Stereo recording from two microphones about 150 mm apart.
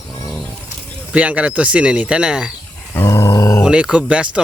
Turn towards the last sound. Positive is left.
turn(degrees=-5)  # may be behind; listen again after turning